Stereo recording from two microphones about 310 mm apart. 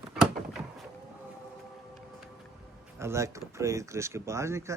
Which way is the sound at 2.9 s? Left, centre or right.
Centre.